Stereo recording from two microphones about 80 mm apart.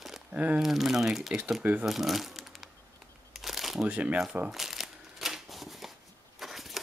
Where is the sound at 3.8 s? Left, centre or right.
Centre.